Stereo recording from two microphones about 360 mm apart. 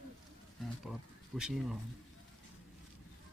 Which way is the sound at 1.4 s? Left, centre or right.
Centre.